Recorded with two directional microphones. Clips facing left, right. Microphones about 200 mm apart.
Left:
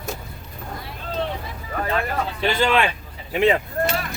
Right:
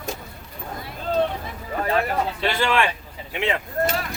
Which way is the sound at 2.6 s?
20° left (ahead or behind).